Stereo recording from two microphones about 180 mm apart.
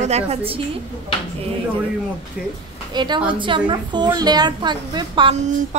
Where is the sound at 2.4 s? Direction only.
5° right (ahead or behind).